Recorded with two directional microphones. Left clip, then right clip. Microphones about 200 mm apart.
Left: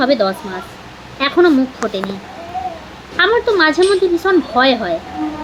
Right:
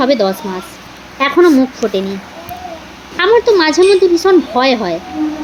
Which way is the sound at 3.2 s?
25° right (ahead or behind).